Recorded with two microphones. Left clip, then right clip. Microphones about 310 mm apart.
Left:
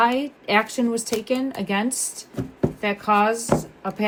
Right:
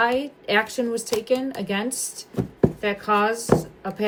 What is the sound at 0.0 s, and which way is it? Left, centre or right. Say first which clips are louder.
A woman's voice: left 1 dB; centre.